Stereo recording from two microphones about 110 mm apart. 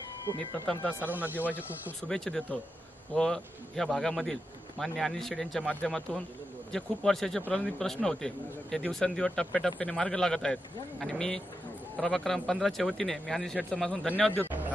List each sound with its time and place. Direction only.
0.8 s speech: 15° right (ahead or behind)
2.0 s a man's voice: 5° left (ahead or behind)